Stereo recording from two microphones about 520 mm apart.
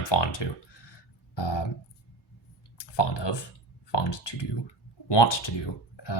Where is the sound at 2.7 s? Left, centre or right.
Left.